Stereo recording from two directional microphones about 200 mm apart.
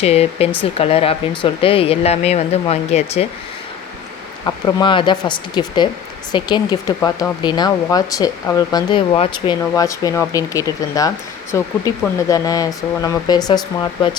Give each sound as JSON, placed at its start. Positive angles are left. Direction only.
{"t": 0.0, "sound": "speech", "side_deg": 30}
{"t": 4.4, "sound": "speech", "side_deg": 20}